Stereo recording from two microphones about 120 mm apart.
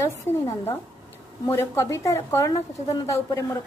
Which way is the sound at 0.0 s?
25° left (ahead or behind).